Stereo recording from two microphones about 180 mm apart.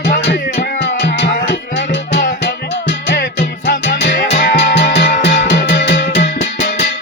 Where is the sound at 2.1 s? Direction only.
70° left (ahead or behind).